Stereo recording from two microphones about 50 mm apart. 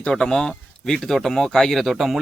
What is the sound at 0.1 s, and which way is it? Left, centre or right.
Speech, centre.